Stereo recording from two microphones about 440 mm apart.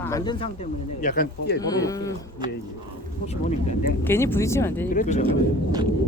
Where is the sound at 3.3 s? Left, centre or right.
Centre.